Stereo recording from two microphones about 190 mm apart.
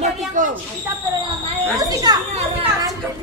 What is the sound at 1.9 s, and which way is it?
Speech, 20° right (ahead or behind).